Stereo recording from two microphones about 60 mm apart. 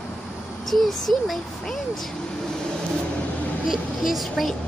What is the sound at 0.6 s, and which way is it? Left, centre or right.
Speech, centre.